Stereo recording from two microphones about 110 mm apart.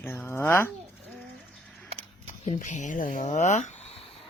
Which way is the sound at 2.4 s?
90° left.